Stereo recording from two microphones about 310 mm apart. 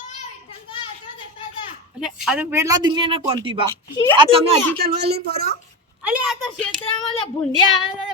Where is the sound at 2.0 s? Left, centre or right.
Centre.